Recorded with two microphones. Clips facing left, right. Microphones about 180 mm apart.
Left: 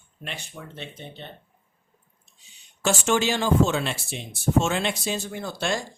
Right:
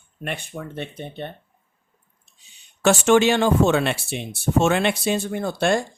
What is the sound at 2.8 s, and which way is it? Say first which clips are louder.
Speech: right 7 dB; 65° right (ahead or behind).